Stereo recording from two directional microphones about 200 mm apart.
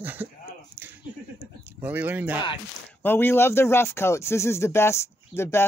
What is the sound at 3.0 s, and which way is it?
Speech, 10° left (ahead or behind).